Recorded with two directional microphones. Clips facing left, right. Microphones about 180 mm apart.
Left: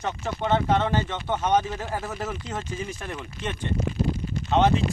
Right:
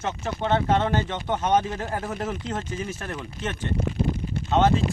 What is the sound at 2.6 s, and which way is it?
Speech, 10° left (ahead or behind).